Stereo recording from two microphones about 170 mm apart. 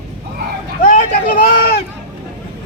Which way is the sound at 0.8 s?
55° left (ahead or behind).